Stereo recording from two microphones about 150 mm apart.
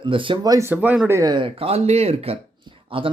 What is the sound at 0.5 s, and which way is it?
Speech, 15° right (ahead or behind).